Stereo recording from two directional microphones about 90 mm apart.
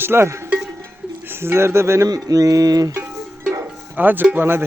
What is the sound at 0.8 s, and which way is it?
Bird, 25° right (ahead or behind).